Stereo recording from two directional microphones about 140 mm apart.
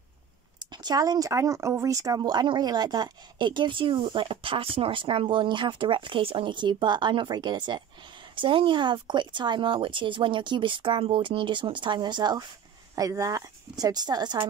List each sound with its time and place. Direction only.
0.6 s a woman's voice: 30° right (ahead or behind)